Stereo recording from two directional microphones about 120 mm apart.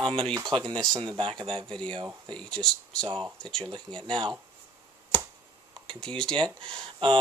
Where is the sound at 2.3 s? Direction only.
5° left (ahead or behind).